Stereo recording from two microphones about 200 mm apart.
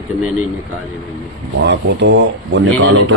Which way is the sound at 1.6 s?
60° right (ahead or behind).